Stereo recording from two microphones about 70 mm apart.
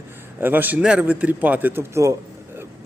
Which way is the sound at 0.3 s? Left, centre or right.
Right.